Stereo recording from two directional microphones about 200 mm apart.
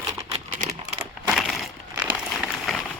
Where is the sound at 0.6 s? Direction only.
35° right (ahead or behind).